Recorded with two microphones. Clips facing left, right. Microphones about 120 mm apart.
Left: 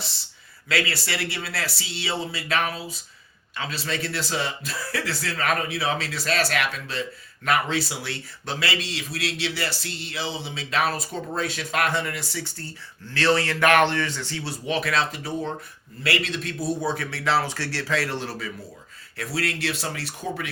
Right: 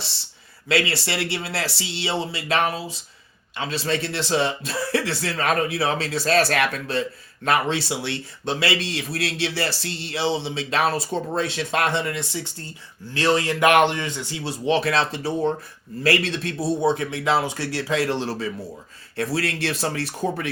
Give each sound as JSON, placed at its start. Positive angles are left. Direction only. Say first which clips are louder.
{"t": 0.7, "sound": "a man's voice", "louder": "right 4 dB", "side_deg": -25}
{"t": 7.4, "sound": "a man's voice", "louder": "right 2 dB", "side_deg": -30}